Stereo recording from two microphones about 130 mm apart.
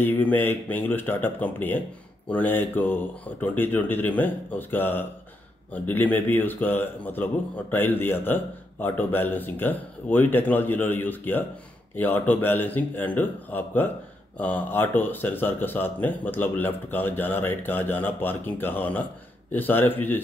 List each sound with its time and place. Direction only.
0.0 s speech: 15° left (ahead or behind)